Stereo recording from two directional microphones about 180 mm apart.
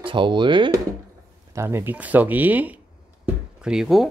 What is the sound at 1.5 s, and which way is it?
Speech, 15° right (ahead or behind).